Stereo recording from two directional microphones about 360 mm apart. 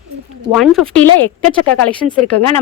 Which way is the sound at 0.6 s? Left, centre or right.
Centre.